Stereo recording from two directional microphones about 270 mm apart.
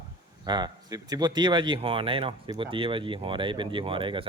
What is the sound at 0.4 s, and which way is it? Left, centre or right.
Speech, centre.